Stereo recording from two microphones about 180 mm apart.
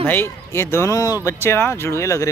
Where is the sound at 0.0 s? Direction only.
10° left (ahead or behind).